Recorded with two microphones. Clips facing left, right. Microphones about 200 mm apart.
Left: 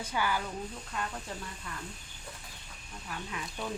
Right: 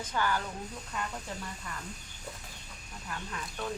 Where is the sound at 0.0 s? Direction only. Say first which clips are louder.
Right 1 dB; 10° left (ahead or behind).